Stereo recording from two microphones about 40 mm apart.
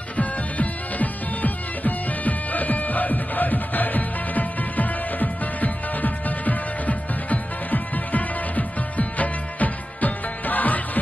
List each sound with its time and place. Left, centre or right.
0.2 s music: left